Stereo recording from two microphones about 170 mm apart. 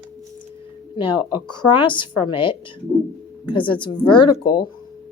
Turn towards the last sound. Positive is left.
turn(degrees=25)  # may be behind; listen again after turning